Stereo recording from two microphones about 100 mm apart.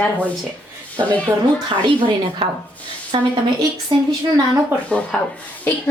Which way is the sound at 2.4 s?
60° right (ahead or behind).